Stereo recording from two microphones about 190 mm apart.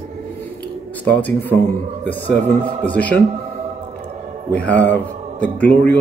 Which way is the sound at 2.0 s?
10° left (ahead or behind).